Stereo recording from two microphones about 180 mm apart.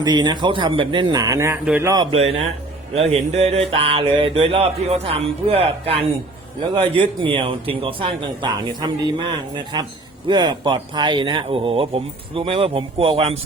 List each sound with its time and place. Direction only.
0.0 s speech: 25° right (ahead or behind)
1.9 s speech: 25° right (ahead or behind)
2.9 s a sound: 35° right (ahead or behind)
6.7 s speech: 25° right (ahead or behind)
10.2 s speech: 25° right (ahead or behind)
12.3 s a sound: 30° right (ahead or behind)